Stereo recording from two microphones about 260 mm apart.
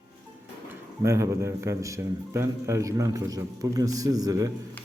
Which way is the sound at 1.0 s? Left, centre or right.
Centre.